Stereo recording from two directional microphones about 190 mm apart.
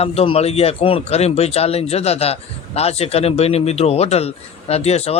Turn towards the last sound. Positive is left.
turn(degrees=35)  # may be behind; listen again after turning